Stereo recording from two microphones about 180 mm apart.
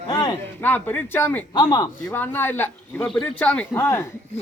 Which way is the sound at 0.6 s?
10° left (ahead or behind).